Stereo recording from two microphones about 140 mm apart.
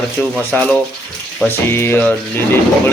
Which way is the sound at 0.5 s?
5° left (ahead or behind).